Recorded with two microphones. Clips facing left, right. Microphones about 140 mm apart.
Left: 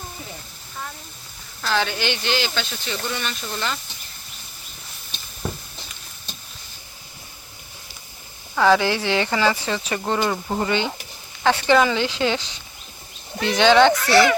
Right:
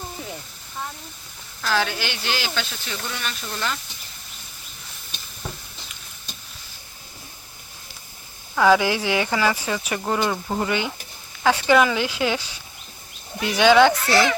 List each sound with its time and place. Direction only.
1.6 s speech: 5° right (ahead or behind)
8.5 s speech: 10° right (ahead or behind)